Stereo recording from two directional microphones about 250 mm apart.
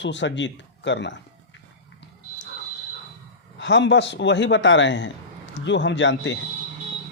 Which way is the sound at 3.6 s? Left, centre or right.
Left.